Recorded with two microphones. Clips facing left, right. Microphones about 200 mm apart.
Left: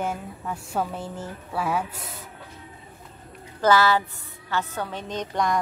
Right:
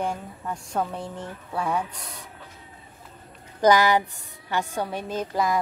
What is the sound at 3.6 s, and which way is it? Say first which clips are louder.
A woman's voice: right 1 dB; 15° right (ahead or behind).